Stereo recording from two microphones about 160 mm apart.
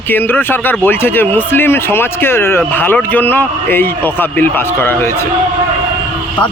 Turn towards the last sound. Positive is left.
turn(degrees=15)  # may be behind; listen again after turning